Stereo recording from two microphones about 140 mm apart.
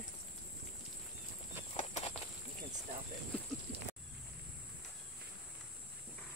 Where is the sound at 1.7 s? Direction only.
55° left (ahead or behind).